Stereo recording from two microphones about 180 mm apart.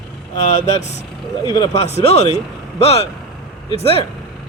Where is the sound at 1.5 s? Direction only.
30° left (ahead or behind).